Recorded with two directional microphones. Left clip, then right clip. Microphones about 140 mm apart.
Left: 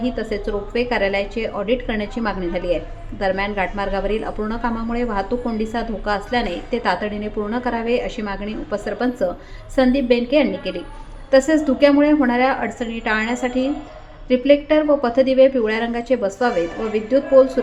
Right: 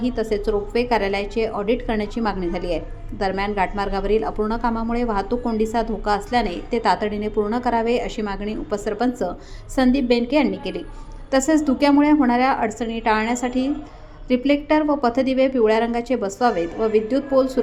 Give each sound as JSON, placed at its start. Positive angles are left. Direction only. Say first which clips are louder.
{"t": 0.0, "sound": "a woman's voice", "louder": "right 1 dB", "side_deg": -35}